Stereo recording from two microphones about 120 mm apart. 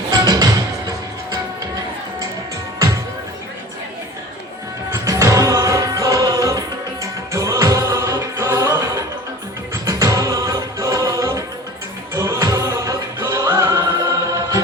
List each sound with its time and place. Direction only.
0.1 s music: 30° right (ahead or behind)
4.9 s music: 25° right (ahead or behind)